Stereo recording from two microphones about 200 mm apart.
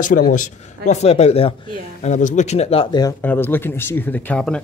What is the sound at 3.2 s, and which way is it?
Speech, 10° left (ahead or behind).